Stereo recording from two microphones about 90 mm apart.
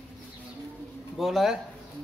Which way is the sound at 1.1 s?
Centre (ahead or behind).